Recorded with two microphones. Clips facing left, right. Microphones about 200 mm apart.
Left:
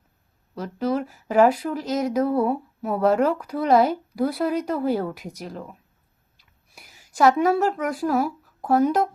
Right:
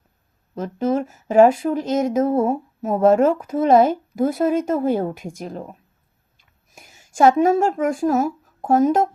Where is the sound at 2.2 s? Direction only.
45° right (ahead or behind).